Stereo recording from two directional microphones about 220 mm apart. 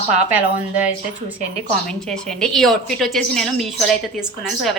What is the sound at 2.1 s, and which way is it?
Speech, centre (ahead or behind).